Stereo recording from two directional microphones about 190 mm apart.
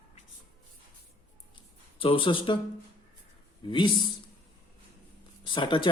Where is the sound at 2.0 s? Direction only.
30° left (ahead or behind).